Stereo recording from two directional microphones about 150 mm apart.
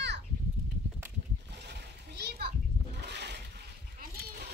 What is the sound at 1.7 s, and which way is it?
Splash, 90° right.